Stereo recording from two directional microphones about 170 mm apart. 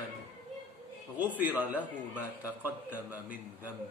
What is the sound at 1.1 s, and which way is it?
A man's voice, 10° right (ahead or behind).